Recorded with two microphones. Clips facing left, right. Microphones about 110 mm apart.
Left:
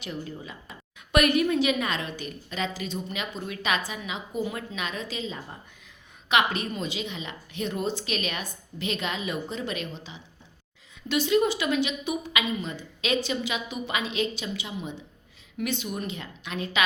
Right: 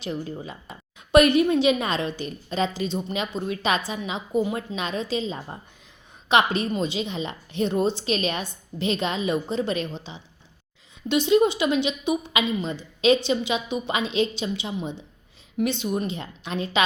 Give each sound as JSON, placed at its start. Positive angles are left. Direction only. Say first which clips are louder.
{"t": 0.0, "sound": "a woman's voice", "louder": "right 5 dB", "side_deg": -30}